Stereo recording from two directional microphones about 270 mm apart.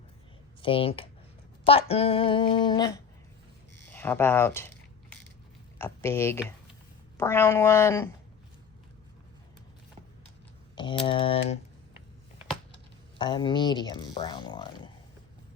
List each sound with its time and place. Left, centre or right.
0.6 s speech: centre
3.9 s a sound: centre
5.8 s speech: centre
10.8 s speech: centre
13.1 s speech: centre